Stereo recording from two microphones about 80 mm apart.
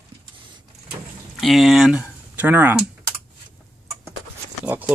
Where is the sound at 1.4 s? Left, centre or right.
Centre.